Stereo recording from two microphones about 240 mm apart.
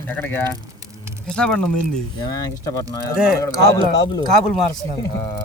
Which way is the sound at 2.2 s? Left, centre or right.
Centre.